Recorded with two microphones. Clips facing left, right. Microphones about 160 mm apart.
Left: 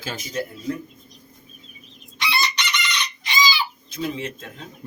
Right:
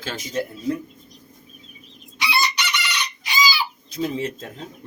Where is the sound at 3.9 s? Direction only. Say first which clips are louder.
Right 5 dB; 40° right (ahead or behind).